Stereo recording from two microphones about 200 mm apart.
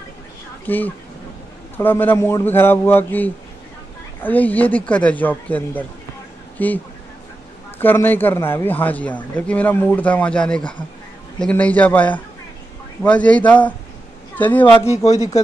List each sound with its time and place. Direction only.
0.7 s a man's voice: 10° left (ahead or behind)
7.8 s a man's voice: 10° left (ahead or behind)
14.3 s a sound: 10° left (ahead or behind)
14.7 s a man's voice: 15° left (ahead or behind)
15.0 s speech: 35° left (ahead or behind)